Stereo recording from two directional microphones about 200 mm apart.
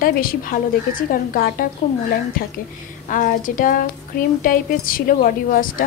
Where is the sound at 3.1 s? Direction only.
40° left (ahead or behind).